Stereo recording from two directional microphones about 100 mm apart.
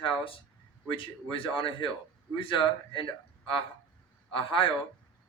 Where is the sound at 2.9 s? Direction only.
60° left (ahead or behind).